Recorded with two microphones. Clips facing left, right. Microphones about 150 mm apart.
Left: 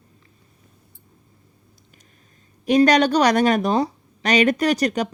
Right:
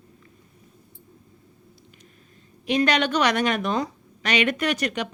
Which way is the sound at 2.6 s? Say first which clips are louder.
Left 6 dB; 40° left (ahead or behind).